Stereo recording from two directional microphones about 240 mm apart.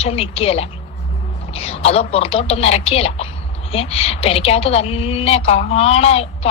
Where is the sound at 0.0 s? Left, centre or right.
Left.